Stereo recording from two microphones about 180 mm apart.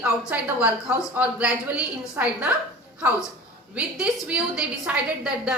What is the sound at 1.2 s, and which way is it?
A woman's voice, 5° right (ahead or behind).